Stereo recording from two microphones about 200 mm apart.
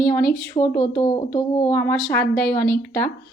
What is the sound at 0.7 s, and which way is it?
Speech, 20° left (ahead or behind).